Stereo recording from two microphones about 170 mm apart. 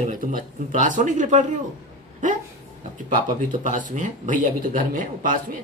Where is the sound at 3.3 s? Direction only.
50° right (ahead or behind).